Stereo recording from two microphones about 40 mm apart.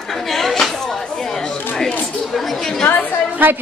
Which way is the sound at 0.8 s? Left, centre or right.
Centre.